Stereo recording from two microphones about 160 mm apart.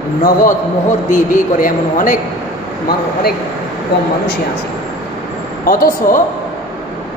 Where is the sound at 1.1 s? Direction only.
60° left (ahead or behind).